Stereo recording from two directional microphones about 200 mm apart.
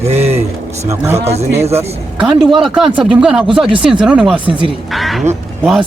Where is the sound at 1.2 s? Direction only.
30° right (ahead or behind).